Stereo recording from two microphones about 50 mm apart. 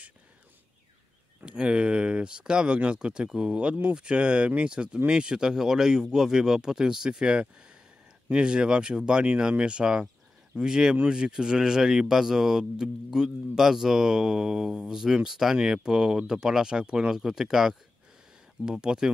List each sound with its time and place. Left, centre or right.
1.4 s speech: centre